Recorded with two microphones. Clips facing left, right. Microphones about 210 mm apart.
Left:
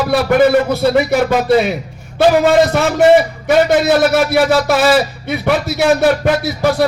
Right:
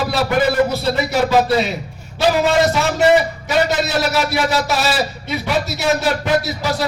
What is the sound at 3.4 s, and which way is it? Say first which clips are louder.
A man's voice: left 7 dB; 55° left (ahead or behind).